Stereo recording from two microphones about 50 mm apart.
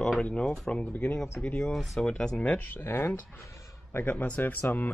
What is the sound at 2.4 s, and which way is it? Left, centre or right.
Speech, left.